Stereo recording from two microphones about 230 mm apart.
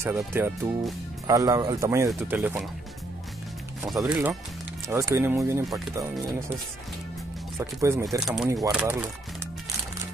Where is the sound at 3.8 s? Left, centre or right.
Centre.